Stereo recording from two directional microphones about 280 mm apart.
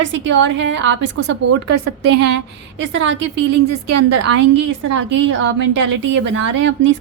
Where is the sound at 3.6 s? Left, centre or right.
Right.